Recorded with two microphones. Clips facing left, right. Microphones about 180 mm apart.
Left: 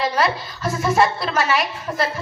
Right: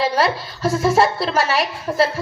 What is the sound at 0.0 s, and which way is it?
A woman's voice, 30° right (ahead or behind).